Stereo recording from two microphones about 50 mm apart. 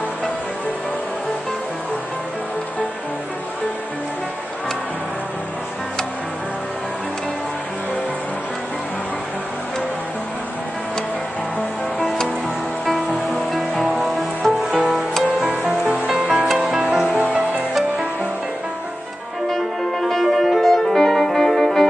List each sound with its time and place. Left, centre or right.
12.8 s music: centre
16.1 s music: centre
17.2 s music: right
19.5 s music: centre